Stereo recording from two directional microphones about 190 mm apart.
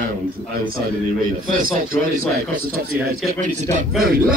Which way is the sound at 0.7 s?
50° right (ahead or behind).